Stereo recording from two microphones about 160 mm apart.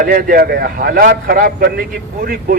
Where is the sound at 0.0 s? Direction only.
65° right (ahead or behind).